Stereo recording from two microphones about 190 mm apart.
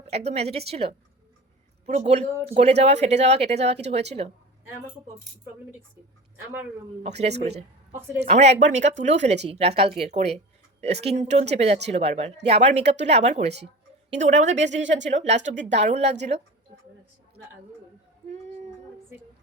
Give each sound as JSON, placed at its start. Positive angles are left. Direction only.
{"t": 0.3, "sound": "speech", "side_deg": -35}
{"t": 7.0, "sound": "speech", "side_deg": -35}
{"t": 7.3, "sound": "a woman's voice", "side_deg": -60}
{"t": 8.2, "sound": "speech", "side_deg": -35}
{"t": 14.8, "sound": "speech", "side_deg": -70}
{"t": 15.1, "sound": "speech", "side_deg": -35}
{"t": 15.5, "sound": "speech", "side_deg": -65}
{"t": 15.9, "sound": "speech", "side_deg": -35}